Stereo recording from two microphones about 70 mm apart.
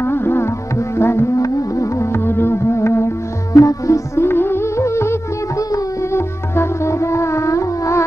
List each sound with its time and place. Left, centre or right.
0.0 s music: left
3.5 s music: left
5.6 s carnatic music: left
6.1 s music: left